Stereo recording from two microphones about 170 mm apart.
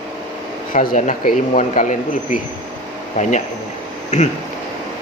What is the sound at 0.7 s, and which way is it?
Speech, 50° left (ahead or behind).